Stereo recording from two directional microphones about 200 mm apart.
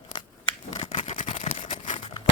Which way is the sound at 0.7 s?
35° left (ahead or behind).